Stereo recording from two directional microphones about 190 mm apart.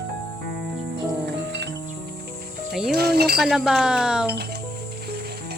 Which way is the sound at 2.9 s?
55° right (ahead or behind).